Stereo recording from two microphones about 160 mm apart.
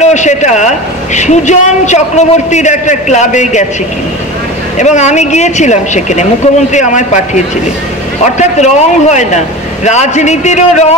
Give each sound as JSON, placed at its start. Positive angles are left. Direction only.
{"t": 0.0, "sound": "a man's voice", "side_deg": 45}
{"t": 4.7, "sound": "a man's voice", "side_deg": 45}